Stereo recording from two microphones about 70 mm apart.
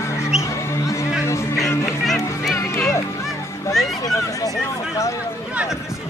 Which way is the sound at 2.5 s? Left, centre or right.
Left.